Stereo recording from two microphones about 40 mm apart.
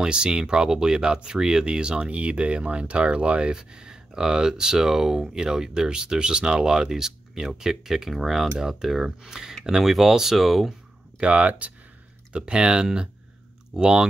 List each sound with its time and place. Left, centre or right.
0.0 s speech: right
3.5 s speech: centre
11.1 s speech: right